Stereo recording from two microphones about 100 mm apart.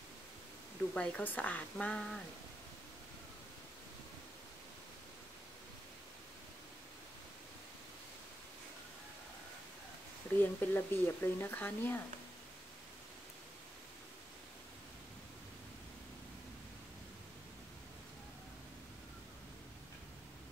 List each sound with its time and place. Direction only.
0.9 s a woman's voice: 10° left (ahead or behind)
10.4 s speech: 20° left (ahead or behind)